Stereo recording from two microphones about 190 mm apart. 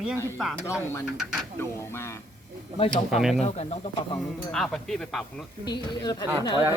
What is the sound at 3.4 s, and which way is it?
Speech, 35° left (ahead or behind).